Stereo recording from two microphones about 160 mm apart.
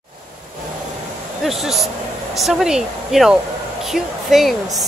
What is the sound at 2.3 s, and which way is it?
Speech, centre (ahead or behind).